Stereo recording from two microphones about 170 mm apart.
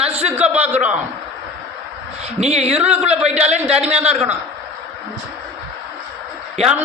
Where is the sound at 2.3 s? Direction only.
40° right (ahead or behind).